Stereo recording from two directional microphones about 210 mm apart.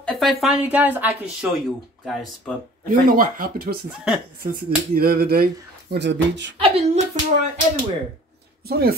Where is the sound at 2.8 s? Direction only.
40° right (ahead or behind); by 6.6 s 55° right (ahead or behind).